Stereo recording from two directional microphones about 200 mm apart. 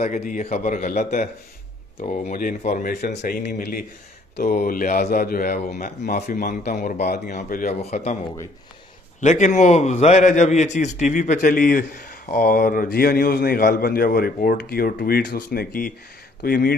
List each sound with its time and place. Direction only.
0.0 s a man's voice: 40° left (ahead or behind)
9.2 s a man's voice: 35° left (ahead or behind)